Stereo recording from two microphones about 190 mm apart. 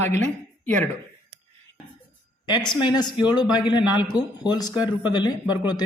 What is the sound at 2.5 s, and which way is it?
Speech, 20° left (ahead or behind).